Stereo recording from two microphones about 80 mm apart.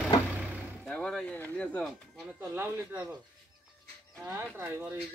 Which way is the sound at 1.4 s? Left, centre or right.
Centre.